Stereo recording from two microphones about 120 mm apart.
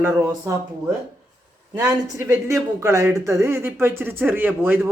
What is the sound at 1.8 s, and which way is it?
Speech, 30° right (ahead or behind).